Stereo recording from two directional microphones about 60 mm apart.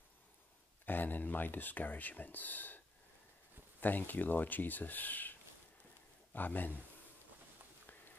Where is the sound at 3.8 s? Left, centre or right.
Left.